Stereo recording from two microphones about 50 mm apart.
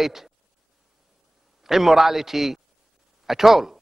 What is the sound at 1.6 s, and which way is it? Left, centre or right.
A man's voice, centre.